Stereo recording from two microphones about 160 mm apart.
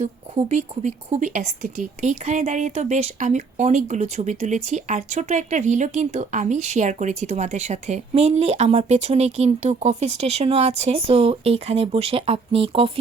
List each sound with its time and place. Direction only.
0.0 s speech: 45° right (ahead or behind)